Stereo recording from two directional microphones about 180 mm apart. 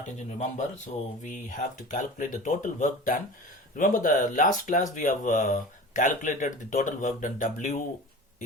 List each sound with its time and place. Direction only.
0.0 s speech: 40° left (ahead or behind)